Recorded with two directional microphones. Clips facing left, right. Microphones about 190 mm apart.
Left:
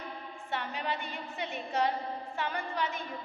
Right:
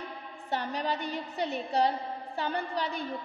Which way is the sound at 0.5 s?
40° right (ahead or behind).